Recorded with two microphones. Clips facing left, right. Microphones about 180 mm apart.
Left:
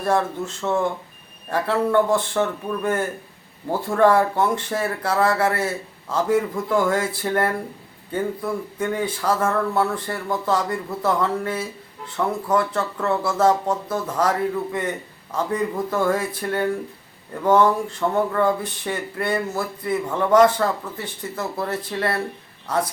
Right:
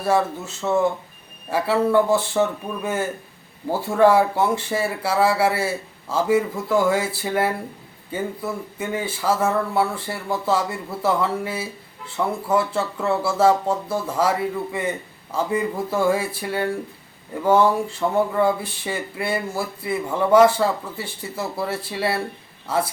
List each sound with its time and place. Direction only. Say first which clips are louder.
0.0 s speech: right 1 dB; 5° right (ahead or behind)